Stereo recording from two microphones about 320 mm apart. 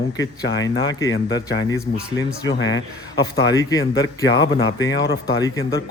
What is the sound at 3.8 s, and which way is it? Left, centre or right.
Speech, left.